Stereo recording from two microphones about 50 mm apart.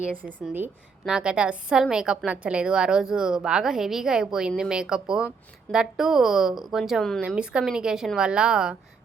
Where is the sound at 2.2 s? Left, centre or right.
Right; by 7.0 s centre.